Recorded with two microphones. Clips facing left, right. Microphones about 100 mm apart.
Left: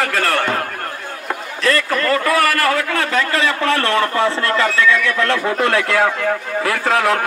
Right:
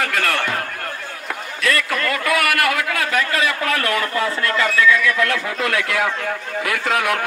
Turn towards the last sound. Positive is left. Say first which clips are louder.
# left 4 dB
turn(degrees=35)  # may be behind; listen again after turning